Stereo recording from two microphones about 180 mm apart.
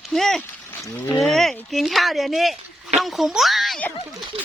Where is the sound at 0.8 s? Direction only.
15° left (ahead or behind).